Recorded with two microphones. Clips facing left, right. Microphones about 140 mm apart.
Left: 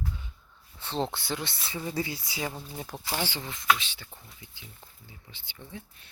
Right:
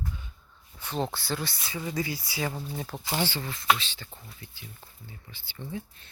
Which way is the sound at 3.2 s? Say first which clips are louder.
Even; 20° left (ahead or behind).